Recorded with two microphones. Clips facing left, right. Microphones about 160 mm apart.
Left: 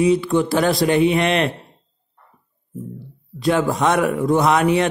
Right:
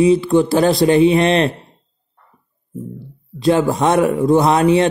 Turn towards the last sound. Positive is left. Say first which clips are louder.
# right 3 dB
turn(degrees=-30)  # may be behind; listen again after turning